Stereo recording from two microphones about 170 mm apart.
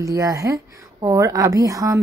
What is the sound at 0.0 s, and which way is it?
A woman's voice, 20° right (ahead or behind).